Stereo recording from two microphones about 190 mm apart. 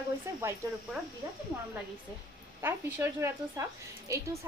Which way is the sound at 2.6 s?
15° right (ahead or behind).